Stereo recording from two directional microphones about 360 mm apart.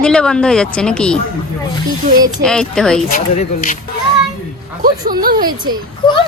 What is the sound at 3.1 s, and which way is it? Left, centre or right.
Speech, left.